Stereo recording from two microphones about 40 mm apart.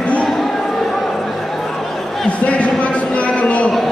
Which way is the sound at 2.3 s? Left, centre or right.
Left.